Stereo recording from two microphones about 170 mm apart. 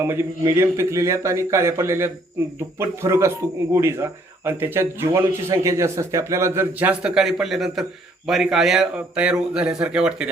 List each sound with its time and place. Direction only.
0.0 s speech: 15° right (ahead or behind)